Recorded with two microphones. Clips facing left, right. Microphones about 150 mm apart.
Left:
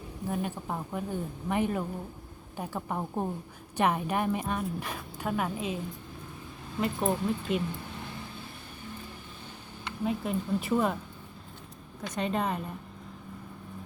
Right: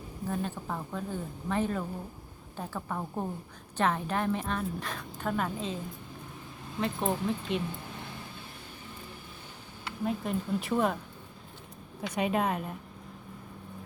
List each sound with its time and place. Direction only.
0.3 s a woman's voice: 10° left (ahead or behind)
6.7 s speech: centre (ahead or behind)
9.8 s speech: centre (ahead or behind)
12.0 s speech: 10° right (ahead or behind)